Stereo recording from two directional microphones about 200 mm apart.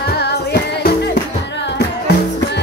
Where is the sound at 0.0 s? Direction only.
55° left (ahead or behind).